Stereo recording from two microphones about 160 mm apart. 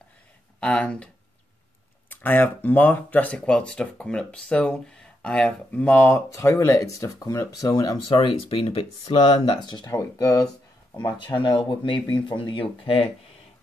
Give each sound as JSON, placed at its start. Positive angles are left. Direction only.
{"t": 0.6, "sound": "speech", "side_deg": 5}
{"t": 8.1, "sound": "speech", "side_deg": 30}